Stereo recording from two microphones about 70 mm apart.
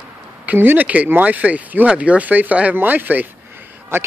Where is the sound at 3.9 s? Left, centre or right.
Right.